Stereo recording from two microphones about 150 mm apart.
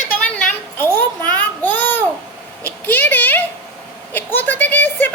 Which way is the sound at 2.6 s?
10° left (ahead or behind).